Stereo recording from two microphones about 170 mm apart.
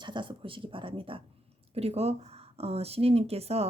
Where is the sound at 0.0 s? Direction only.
30° right (ahead or behind).